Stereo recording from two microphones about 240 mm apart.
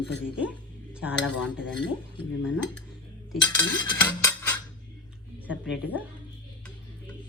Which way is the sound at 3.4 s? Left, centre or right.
Centre.